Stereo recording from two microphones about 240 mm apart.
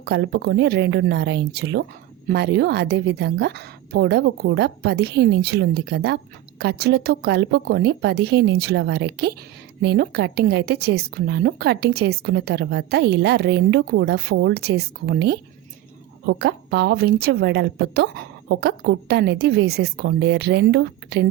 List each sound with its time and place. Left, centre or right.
0.0 s a woman's voice: right